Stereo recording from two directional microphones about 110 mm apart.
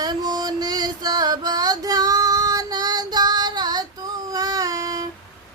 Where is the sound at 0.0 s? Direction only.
40° right (ahead or behind).